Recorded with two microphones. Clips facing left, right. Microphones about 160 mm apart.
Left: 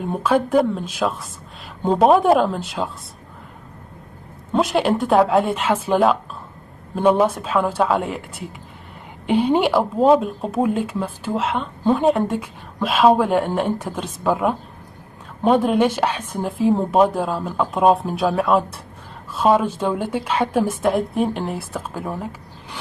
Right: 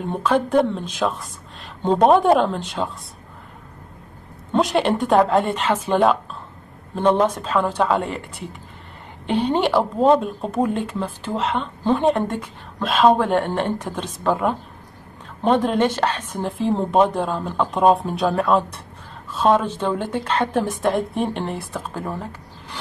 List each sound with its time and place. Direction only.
0.0 s speech: 5° left (ahead or behind)
4.5 s a woman's voice: centre (ahead or behind)